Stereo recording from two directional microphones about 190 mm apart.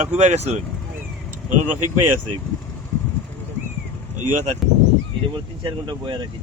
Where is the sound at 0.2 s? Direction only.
35° right (ahead or behind).